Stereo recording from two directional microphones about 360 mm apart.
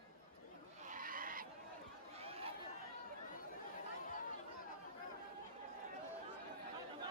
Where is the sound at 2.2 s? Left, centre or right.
Centre.